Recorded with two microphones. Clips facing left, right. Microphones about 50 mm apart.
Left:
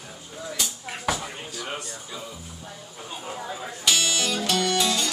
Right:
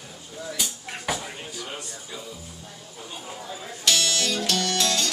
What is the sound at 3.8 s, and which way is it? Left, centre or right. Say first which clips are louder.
Music: even; centre.